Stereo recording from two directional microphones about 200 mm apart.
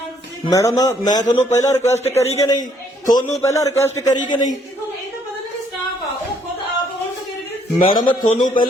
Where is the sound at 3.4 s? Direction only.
15° left (ahead or behind).